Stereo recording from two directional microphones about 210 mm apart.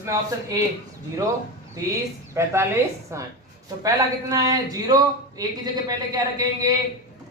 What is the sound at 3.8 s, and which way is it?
Speech, 15° right (ahead or behind).